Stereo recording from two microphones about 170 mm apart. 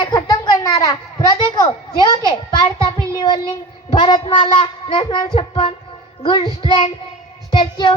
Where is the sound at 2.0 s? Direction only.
25° left (ahead or behind).